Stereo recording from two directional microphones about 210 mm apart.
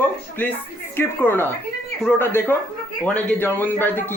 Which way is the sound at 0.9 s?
10° left (ahead or behind).